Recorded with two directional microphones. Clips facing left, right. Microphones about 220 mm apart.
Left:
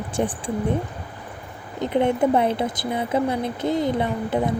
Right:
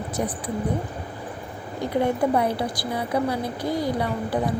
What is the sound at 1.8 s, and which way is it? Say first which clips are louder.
A woman's voice: left 3 dB; 20° left (ahead or behind).